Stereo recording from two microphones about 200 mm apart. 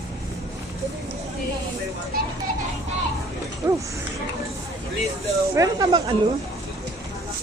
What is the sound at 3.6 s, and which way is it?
Speech, 15° right (ahead or behind).